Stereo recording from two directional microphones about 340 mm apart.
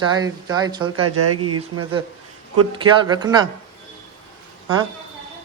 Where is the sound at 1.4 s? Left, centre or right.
Right.